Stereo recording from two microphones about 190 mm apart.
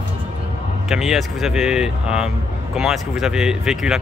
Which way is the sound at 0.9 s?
Centre (ahead or behind).